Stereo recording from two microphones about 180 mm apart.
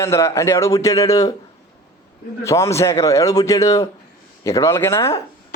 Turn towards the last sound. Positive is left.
turn(degrees=15)  # may be behind; listen again after turning